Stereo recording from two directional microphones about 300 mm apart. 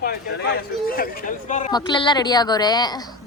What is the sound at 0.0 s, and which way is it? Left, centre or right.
Speech, left.